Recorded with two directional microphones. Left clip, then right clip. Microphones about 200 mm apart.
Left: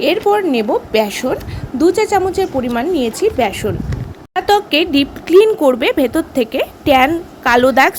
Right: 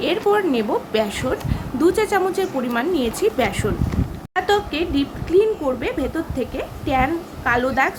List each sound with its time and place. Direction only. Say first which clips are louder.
0.0 s a woman's voice: left 5 dB; 30° left (ahead or behind)
4.4 s speech: left 7 dB; 35° left (ahead or behind)